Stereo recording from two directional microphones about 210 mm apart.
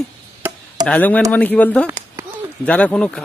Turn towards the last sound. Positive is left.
turn(degrees=5)  # may be behind; listen again after turning